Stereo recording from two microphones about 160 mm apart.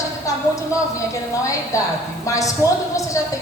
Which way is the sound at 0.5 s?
20° left (ahead or behind).